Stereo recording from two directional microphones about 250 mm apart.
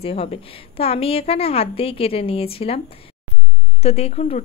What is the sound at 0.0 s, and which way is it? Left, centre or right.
Speech, left.